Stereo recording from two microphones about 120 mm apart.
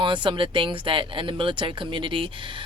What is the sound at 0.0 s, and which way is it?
Speech, 40° right (ahead or behind).